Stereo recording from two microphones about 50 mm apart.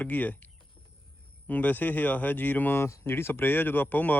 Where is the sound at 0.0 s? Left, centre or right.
Left.